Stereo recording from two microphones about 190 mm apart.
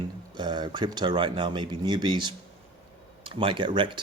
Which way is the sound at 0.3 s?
25° right (ahead or behind).